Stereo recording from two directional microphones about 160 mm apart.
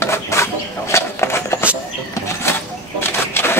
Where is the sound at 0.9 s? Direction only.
15° left (ahead or behind).